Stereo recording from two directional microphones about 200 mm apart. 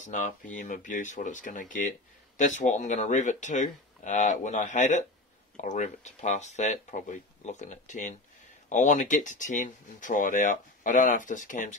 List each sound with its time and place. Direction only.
0.6 s speech: 40° left (ahead or behind)